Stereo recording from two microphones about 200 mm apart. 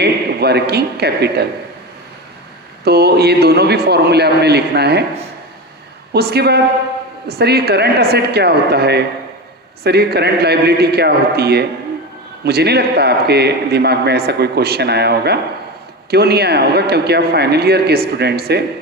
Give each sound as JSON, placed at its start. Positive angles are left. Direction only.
{"t": 0.0, "sound": "a man's voice", "side_deg": -55}
{"t": 2.8, "sound": "a man's voice", "side_deg": -55}
{"t": 6.1, "sound": "a man's voice", "side_deg": -55}